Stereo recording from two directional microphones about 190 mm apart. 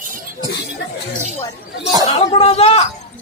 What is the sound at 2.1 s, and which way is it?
Speech, 35° left (ahead or behind).